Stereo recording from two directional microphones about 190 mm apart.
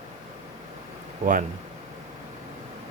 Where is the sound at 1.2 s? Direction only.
35° right (ahead or behind).